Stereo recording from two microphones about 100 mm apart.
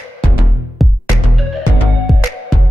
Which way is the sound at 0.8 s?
Centre (ahead or behind).